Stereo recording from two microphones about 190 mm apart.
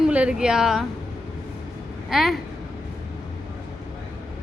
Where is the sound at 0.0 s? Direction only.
5° right (ahead or behind).